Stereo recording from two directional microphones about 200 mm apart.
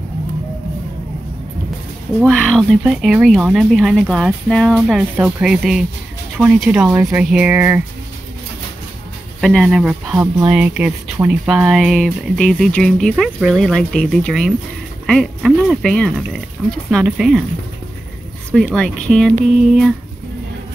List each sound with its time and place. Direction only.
2.1 s speech: centre (ahead or behind)
9.4 s speech: centre (ahead or behind)
18.5 s speech: 5° left (ahead or behind)